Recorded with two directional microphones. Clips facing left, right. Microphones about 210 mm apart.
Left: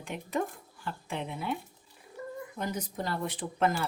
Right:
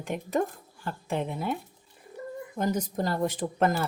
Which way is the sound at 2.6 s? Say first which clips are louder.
Right 8 dB; 45° right (ahead or behind).